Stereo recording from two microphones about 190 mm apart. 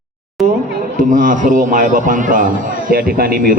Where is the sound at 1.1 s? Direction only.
45° right (ahead or behind).